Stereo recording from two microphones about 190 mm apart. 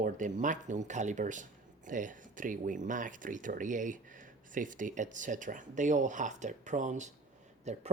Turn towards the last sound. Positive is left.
turn(degrees=-35)  # may be behind; listen again after turning